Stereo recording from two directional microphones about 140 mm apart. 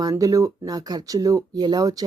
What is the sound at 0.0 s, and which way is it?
Speech, 25° right (ahead or behind).